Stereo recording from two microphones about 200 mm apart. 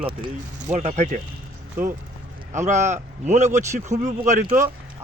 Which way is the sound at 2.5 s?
35° right (ahead or behind).